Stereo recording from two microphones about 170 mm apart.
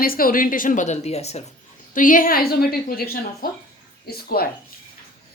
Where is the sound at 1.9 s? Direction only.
50° left (ahead or behind).